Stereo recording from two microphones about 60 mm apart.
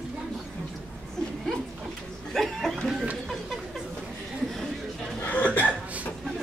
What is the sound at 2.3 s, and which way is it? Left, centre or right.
Chuckle, centre.